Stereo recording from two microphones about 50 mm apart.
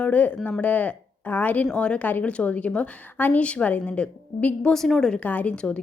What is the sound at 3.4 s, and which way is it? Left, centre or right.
Speech, left.